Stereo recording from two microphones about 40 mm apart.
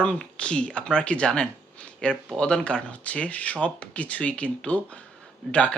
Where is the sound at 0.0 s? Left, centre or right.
Left.